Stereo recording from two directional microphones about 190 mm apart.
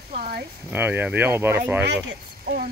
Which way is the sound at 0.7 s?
10° right (ahead or behind).